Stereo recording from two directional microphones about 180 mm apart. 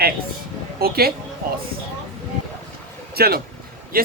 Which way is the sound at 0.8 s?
60° right (ahead or behind).